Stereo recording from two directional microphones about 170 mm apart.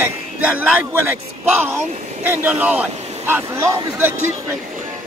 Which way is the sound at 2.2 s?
10° right (ahead or behind).